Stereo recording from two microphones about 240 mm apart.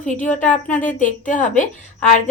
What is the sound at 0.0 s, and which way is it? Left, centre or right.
A woman's voice, left.